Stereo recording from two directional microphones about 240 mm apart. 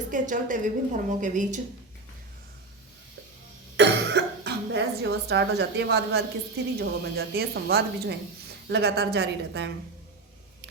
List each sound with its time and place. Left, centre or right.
0.1 s a woman's voice: right
3.8 s cough: right
6.7 s a woman's voice: right